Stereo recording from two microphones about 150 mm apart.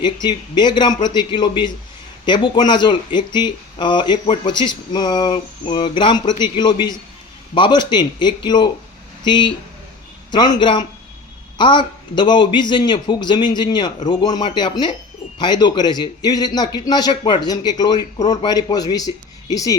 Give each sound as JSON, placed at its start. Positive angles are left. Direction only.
{"t": 0.0, "sound": "a man's voice", "side_deg": 30}